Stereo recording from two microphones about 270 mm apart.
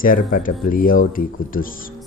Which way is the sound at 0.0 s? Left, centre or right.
Left.